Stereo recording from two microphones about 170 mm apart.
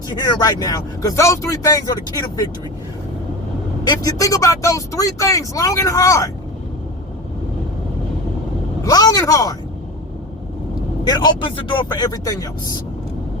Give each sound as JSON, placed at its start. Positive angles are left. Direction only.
{"t": 0.1, "sound": "speech", "side_deg": 20}
{"t": 3.8, "sound": "speech", "side_deg": 20}
{"t": 8.8, "sound": "speech", "side_deg": 20}
{"t": 11.0, "sound": "speech", "side_deg": 25}